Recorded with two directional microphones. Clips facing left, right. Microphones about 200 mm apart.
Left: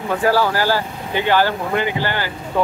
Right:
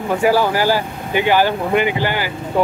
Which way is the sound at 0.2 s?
15° right (ahead or behind).